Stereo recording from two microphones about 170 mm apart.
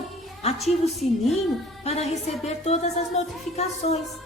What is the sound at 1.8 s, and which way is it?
Music, 40° left (ahead or behind).